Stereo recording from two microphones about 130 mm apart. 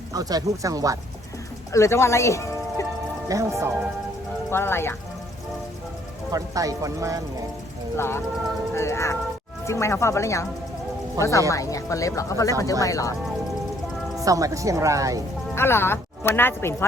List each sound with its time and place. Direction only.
0.1 s speech: 30° right (ahead or behind)
1.7 s speech: 20° left (ahead or behind)
3.2 s speech: 25° right (ahead or behind)
4.5 s speech: 20° left (ahead or behind)
6.3 s speech: 25° right (ahead or behind)
7.9 s speech: 20° left (ahead or behind)
14.2 s speech: 25° right (ahead or behind)
15.5 s speech: 20° left (ahead or behind)